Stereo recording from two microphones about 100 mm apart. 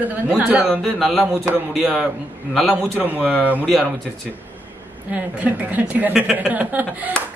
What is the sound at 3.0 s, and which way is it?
Speech, 15° right (ahead or behind).